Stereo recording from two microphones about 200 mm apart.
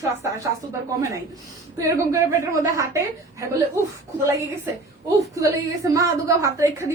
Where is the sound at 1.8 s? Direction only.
15° right (ahead or behind).